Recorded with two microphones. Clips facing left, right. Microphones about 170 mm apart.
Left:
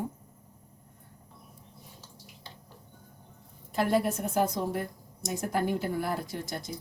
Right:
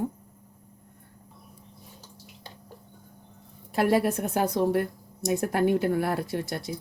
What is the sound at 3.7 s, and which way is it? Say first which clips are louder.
Speech: right 4 dB; 70° right (ahead or behind).